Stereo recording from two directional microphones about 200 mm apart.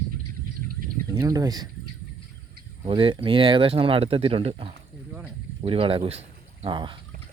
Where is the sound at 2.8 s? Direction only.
25° right (ahead or behind).